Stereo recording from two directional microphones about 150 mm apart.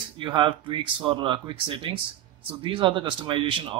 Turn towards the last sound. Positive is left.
turn(degrees=-35)  # may be behind; listen again after turning